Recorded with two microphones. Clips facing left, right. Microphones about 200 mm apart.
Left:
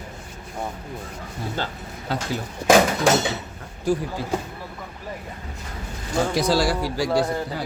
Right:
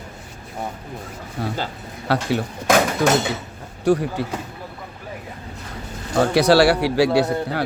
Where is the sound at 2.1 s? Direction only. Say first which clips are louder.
Right 6 dB; 70° right (ahead or behind).